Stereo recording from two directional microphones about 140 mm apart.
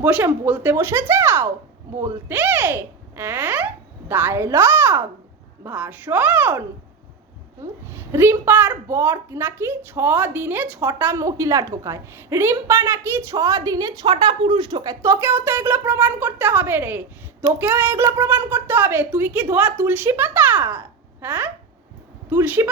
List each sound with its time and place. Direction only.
0.0 s a woman's voice: 15° right (ahead or behind)